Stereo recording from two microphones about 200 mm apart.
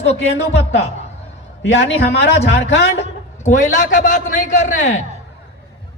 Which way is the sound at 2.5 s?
60° left (ahead or behind).